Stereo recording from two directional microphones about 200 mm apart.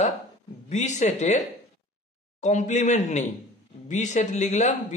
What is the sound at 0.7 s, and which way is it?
Speech, 35° left (ahead or behind).